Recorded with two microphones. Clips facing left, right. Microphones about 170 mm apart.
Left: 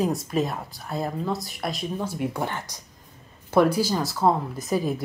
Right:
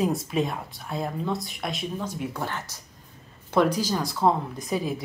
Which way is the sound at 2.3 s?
15° left (ahead or behind).